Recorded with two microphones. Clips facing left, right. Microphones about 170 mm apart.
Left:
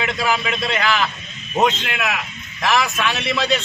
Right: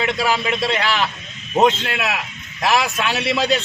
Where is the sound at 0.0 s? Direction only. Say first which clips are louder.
Right 1 dB; 30° right (ahead or behind).